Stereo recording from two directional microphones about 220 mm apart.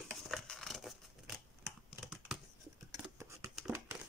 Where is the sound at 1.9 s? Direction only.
Centre (ahead or behind).